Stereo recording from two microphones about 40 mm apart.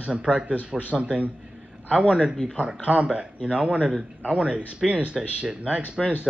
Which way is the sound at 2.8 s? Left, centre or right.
Right.